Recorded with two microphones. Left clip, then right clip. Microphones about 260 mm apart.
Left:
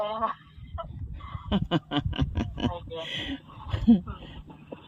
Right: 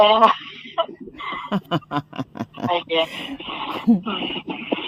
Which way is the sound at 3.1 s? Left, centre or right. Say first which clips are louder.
Right 5 dB; right.